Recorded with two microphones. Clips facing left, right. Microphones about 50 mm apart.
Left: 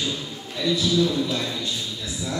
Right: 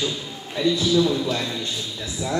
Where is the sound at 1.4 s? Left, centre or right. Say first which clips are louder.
Right 1 dB; centre.